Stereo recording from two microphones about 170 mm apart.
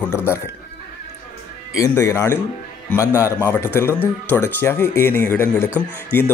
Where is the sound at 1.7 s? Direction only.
20° left (ahead or behind).